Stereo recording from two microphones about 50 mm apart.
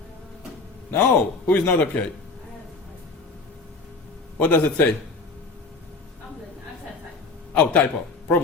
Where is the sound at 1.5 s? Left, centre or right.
Left.